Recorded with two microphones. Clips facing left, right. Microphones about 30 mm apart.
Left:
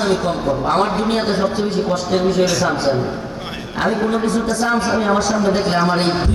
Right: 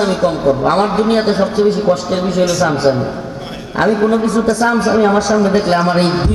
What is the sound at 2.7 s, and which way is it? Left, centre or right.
Speech, centre.